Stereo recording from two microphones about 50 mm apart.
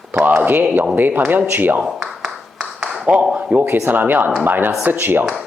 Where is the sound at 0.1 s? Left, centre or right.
Right.